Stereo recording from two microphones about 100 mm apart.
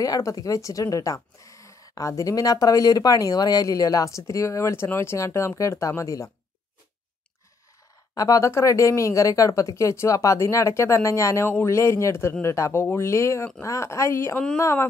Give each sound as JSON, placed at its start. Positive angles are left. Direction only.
{"t": 0.0, "sound": "a woman's voice", "side_deg": 35}
{"t": 8.1, "sound": "speech", "side_deg": 35}